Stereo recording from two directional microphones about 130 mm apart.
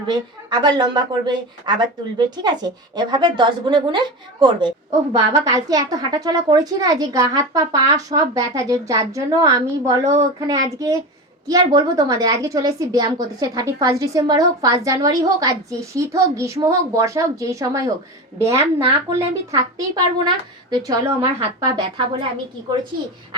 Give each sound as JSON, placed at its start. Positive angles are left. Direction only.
{"t": 0.1, "sound": "a woman's voice", "side_deg": -35}
{"t": 10.0, "sound": "speech", "side_deg": -60}
{"t": 10.4, "sound": "a woman's voice", "side_deg": -25}
{"t": 18.5, "sound": "speech", "side_deg": -45}
{"t": 19.9, "sound": "speech", "side_deg": -35}